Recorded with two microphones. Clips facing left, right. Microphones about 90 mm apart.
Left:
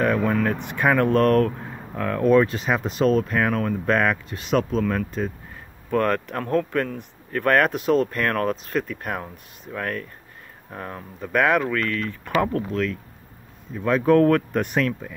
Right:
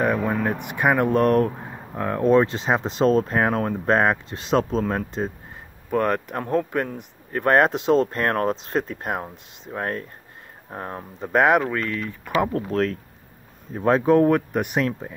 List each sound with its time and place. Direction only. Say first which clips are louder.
0.0 s speech: left 1 dB; 15° right (ahead or behind)
5.9 s speech: even; 15° right (ahead or behind)
12.5 s speech: right 2 dB; 40° right (ahead or behind)
14.0 s speech: left 3 dB; 20° right (ahead or behind)
14.9 s speech: even; 30° right (ahead or behind)